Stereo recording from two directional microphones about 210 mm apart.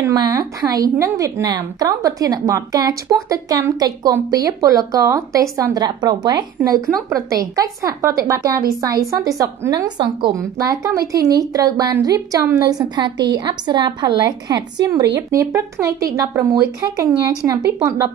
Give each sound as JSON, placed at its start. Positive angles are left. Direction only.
{"t": 0.0, "sound": "a woman's voice", "side_deg": -15}